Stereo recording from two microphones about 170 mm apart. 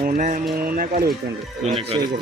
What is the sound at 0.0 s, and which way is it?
Speech, 50° right (ahead or behind).